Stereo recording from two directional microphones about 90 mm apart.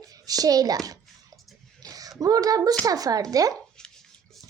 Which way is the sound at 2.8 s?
45° right (ahead or behind).